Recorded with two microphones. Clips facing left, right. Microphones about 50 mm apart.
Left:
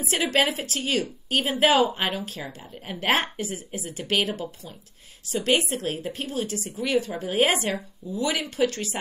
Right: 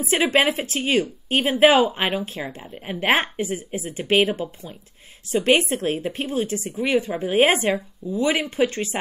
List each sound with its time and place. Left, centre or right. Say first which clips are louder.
0.1 s speech: right 4 dB; right